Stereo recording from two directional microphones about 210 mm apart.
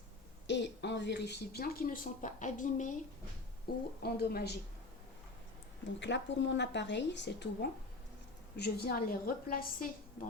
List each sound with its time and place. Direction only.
0.4 s a woman's voice: 55° left (ahead or behind)
6.0 s a woman's voice: 60° left (ahead or behind); by 10.2 s 45° left (ahead or behind)